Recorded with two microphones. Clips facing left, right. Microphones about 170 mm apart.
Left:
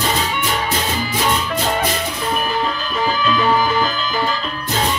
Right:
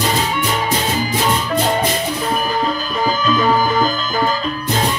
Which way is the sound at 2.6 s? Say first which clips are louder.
Right 2 dB; 40° right (ahead or behind).